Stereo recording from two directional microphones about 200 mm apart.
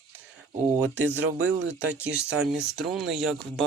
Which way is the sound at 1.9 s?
5° right (ahead or behind).